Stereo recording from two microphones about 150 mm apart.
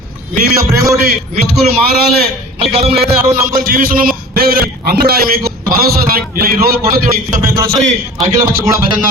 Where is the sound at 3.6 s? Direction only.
70° right (ahead or behind).